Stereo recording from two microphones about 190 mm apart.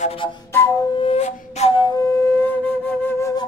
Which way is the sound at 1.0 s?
35° left (ahead or behind).